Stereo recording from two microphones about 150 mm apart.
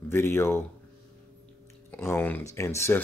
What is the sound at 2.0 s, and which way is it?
Speech, 15° left (ahead or behind).